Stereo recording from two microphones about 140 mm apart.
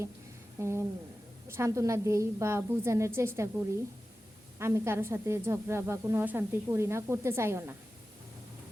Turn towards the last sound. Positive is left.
turn(degrees=-20)  # may be behind; listen again after turning